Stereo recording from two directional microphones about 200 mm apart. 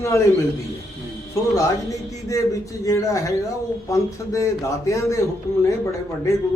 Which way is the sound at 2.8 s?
15° left (ahead or behind).